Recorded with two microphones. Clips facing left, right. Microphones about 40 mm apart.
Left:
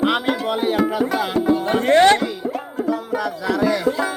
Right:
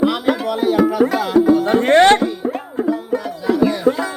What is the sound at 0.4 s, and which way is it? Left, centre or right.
Music, left.